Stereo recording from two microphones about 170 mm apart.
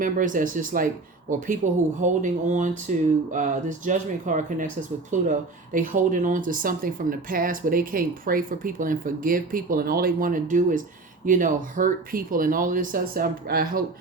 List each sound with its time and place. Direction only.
0.0 s speech: 50° right (ahead or behind)